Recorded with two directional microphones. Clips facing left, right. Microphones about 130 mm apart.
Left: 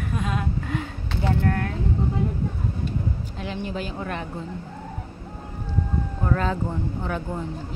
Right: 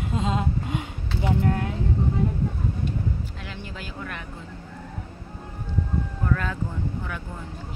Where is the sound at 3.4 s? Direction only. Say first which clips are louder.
Left 8 dB; 20° left (ahead or behind).